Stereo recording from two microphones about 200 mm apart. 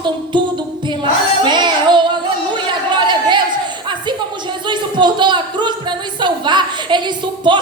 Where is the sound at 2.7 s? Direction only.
25° right (ahead or behind).